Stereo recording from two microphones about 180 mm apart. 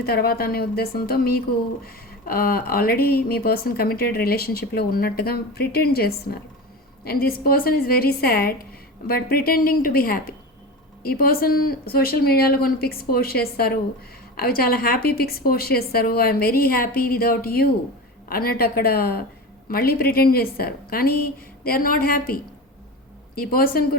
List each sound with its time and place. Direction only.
0.0 s speech: 60° left (ahead or behind)